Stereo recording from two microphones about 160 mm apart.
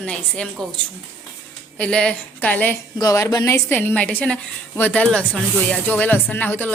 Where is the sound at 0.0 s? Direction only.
5° left (ahead or behind).